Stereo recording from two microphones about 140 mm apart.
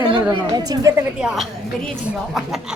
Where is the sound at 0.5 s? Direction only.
30° right (ahead or behind).